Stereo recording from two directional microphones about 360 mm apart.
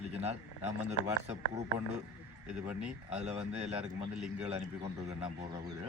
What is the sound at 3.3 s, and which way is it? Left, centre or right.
Speech, centre.